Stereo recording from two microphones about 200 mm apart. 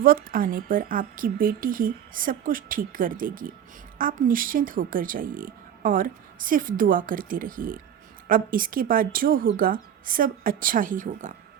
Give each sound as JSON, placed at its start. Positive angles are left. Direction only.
{"t": 0.0, "sound": "speech", "side_deg": -45}